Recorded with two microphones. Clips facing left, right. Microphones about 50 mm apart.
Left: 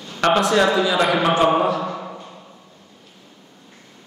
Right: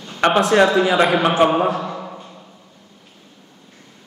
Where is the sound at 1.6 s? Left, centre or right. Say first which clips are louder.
Even; right.